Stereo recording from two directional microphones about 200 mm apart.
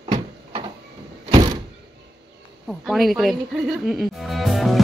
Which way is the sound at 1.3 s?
20° right (ahead or behind).